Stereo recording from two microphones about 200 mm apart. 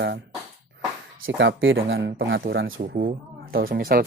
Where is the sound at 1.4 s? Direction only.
70° right (ahead or behind).